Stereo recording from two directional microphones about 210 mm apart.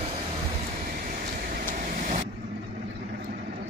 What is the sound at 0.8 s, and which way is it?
Vehicle, 45° right (ahead or behind).